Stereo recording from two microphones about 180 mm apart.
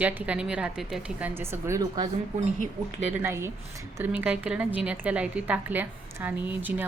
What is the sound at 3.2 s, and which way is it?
A woman's voice, 15° right (ahead or behind).